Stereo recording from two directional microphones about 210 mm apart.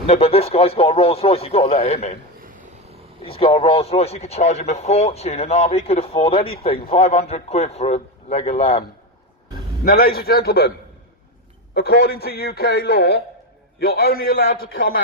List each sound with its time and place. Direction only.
0.0 s speech: 30° left (ahead or behind)
3.2 s speech: 25° left (ahead or behind)
9.8 s a man's voice: 45° left (ahead or behind)
11.7 s a man's voice: 50° left (ahead or behind)
14.6 s speech: 70° left (ahead or behind)